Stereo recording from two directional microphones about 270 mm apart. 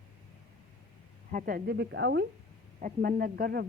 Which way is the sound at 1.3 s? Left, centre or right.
Right.